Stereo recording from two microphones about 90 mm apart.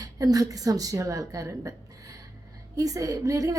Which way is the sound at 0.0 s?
40° right (ahead or behind).